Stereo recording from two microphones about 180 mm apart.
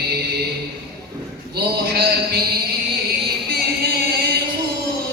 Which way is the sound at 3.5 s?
60° right (ahead or behind).